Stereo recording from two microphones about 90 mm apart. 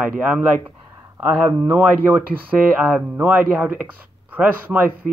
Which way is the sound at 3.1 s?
15° right (ahead or behind).